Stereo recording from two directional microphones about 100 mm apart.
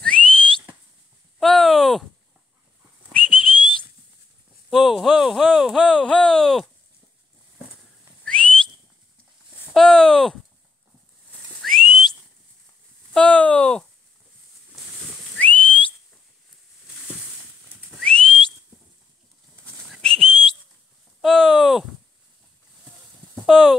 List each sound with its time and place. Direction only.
0.0 s whistling: 10° left (ahead or behind)
1.4 s a sound: 5° left (ahead or behind)
3.1 s whistling: 10° left (ahead or behind)
4.6 s speech: centre (ahead or behind)
8.2 s whistling: 10° left (ahead or behind)
9.8 s a sound: 5° left (ahead or behind)
11.6 s whistling: 5° left (ahead or behind)
13.1 s speech: 10° left (ahead or behind)
15.3 s whistle: 15° left (ahead or behind)
17.9 s whistle: 5° left (ahead or behind)
19.9 s whistle: 5° left (ahead or behind)
21.2 s speech: 5° left (ahead or behind)
23.3 s a sound: centre (ahead or behind)